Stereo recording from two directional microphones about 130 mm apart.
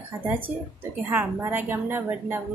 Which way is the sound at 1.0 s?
15° right (ahead or behind).